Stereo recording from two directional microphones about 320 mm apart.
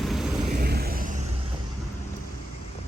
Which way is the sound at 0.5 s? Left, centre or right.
Right.